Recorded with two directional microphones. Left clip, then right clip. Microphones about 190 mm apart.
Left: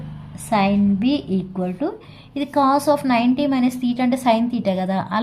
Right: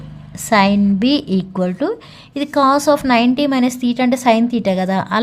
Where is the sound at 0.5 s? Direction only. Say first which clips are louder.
Right 5 dB; 45° right (ahead or behind).